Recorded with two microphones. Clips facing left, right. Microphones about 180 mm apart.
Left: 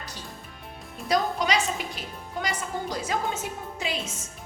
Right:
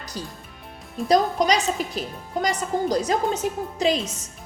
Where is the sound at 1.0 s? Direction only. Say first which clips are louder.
Right 6 dB; 35° right (ahead or behind).